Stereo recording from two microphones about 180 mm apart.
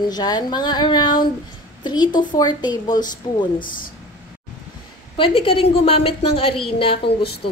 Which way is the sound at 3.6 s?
50° left (ahead or behind).